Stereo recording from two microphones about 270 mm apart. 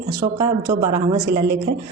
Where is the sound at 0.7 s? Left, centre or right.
Centre.